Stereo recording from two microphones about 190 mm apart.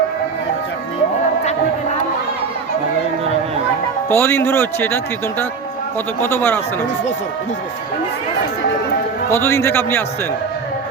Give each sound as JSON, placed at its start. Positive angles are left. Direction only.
{"t": 4.1, "sound": "a man's voice", "side_deg": 10}
{"t": 6.2, "sound": "a man's voice", "side_deg": 10}
{"t": 9.3, "sound": "a man's voice", "side_deg": 10}